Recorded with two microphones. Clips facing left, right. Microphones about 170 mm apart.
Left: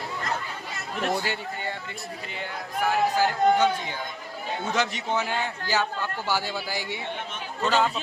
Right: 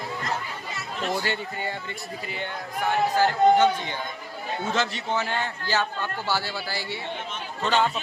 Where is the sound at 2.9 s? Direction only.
10° left (ahead or behind).